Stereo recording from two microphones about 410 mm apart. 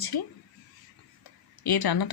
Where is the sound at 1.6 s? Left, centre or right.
Left.